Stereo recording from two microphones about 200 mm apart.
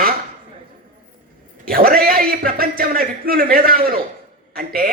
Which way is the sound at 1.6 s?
45° right (ahead or behind).